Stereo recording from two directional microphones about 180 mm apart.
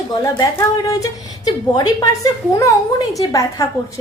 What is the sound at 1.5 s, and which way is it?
A woman's voice, 20° left (ahead or behind).